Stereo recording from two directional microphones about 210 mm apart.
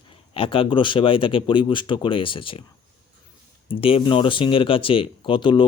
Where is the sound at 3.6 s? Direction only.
25° left (ahead or behind).